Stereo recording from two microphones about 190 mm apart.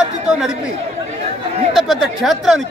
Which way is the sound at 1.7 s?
Centre (ahead or behind).